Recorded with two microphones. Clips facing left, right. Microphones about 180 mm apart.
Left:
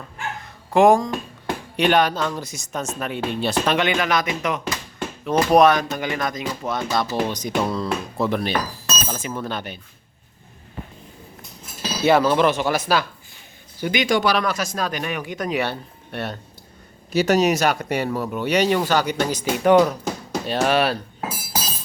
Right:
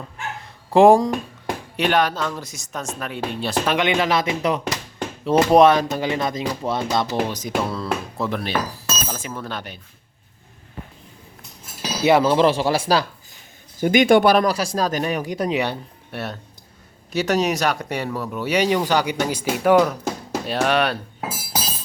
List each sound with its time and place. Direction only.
0.7 s speech: 30° right (ahead or behind)
1.7 s speech: centre (ahead or behind)
3.8 s speech: 25° right (ahead or behind)
7.1 s speech: 10° right (ahead or behind)
11.8 s speech: 20° right (ahead or behind)
13.7 s speech: 45° right (ahead or behind)
14.4 s speech: 30° right (ahead or behind)
15.5 s speech: 15° right (ahead or behind)
16.1 s speech: centre (ahead or behind)